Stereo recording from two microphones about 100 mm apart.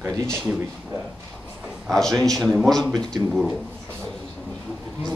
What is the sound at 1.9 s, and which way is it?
Speech, 5° left (ahead or behind).